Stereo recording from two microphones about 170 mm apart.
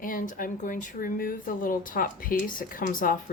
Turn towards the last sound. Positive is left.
turn(degrees=55)  # may be behind; listen again after turning